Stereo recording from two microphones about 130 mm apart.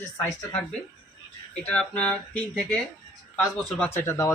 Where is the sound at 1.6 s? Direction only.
10° left (ahead or behind).